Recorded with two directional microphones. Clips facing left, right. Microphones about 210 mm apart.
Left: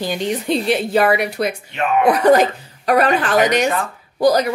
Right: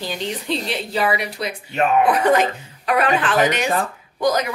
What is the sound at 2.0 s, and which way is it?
A woman's voice, 40° left (ahead or behind).